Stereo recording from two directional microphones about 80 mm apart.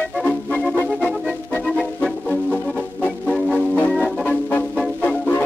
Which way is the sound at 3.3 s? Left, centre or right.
Centre.